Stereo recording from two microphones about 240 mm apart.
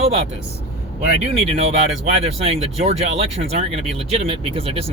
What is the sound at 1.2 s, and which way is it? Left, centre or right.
Speech, right.